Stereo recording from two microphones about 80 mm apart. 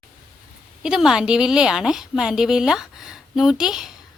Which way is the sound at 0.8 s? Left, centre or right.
Centre.